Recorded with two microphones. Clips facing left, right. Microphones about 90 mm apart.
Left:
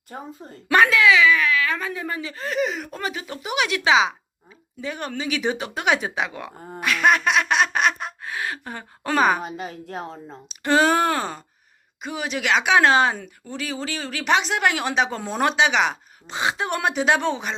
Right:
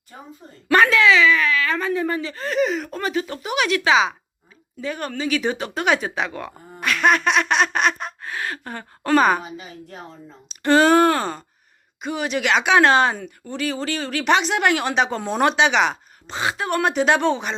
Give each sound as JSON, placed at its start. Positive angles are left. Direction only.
{"t": 0.1, "sound": "a woman's voice", "side_deg": 45}
{"t": 0.7, "sound": "speech", "side_deg": 10}
{"t": 6.7, "sound": "a sound", "side_deg": 10}
{"t": 9.4, "sound": "a woman's voice", "side_deg": 50}
{"t": 10.5, "sound": "speech", "side_deg": 5}
{"t": 16.3, "sound": "speech", "side_deg": 20}
{"t": 16.8, "sound": "speech", "side_deg": 5}